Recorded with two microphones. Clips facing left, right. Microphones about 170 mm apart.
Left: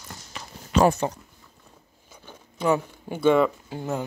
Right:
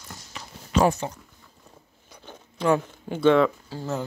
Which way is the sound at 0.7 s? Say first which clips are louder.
Left 2 dB; 55° left (ahead or behind).